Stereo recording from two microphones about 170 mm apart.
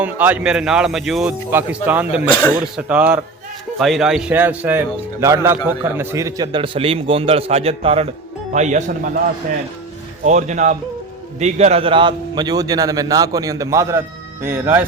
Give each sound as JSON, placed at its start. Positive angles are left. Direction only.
{"t": 0.0, "sound": "a man's voice", "side_deg": -10}
{"t": 2.3, "sound": "speech", "side_deg": 10}
{"t": 2.7, "sound": "a man's voice", "side_deg": -10}
{"t": 8.5, "sound": "speech", "side_deg": -45}
{"t": 10.2, "sound": "a man's voice", "side_deg": -45}